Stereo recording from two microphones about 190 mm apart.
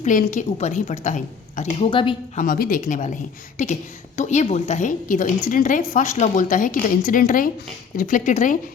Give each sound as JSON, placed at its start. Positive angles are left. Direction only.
{"t": 0.0, "sound": "a woman's voice", "side_deg": 45}
{"t": 1.9, "sound": "a woman's voice", "side_deg": 30}
{"t": 2.4, "sound": "a woman's voice", "side_deg": 50}
{"t": 4.2, "sound": "a woman's voice", "side_deg": 40}